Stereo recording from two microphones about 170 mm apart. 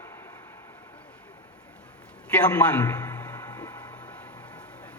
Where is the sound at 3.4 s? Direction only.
25° left (ahead or behind).